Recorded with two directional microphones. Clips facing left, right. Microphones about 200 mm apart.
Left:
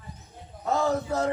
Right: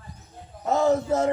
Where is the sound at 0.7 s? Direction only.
25° right (ahead or behind).